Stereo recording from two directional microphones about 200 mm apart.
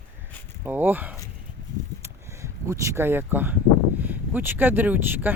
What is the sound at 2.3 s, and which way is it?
Speech, 15° right (ahead or behind).